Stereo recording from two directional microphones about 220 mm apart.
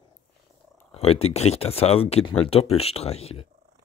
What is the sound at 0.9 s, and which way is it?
Speech, 30° left (ahead or behind).